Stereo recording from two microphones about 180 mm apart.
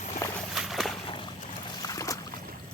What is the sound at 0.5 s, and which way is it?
Slosh, centre (ahead or behind).